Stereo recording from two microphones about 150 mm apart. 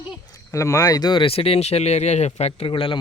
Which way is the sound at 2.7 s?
35° left (ahead or behind).